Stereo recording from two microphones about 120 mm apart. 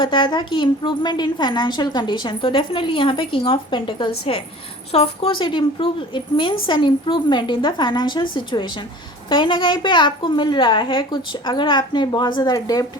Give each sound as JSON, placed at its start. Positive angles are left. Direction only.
{"t": 0.0, "sound": "a woman's voice", "side_deg": 45}